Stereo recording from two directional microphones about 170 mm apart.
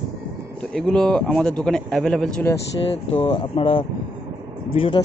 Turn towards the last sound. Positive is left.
turn(degrees=30)  # may be behind; listen again after turning